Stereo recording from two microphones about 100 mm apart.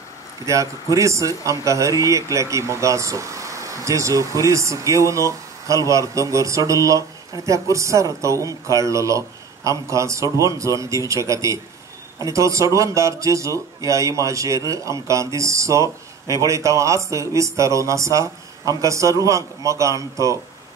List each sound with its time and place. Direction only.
0.5 s speech: 30° right (ahead or behind)